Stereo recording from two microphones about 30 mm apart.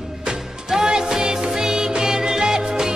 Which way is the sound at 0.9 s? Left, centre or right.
Right.